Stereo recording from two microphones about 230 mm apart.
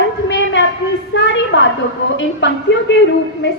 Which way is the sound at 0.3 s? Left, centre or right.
Left.